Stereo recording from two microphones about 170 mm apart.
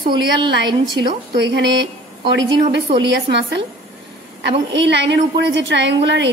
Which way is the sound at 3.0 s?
90° right.